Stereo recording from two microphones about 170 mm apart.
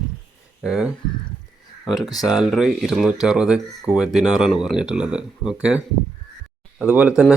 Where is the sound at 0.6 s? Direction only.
5° right (ahead or behind).